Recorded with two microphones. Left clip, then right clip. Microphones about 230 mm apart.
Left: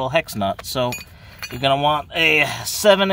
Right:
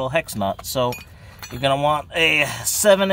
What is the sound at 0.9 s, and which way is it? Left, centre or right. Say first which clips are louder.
Chink: even; left.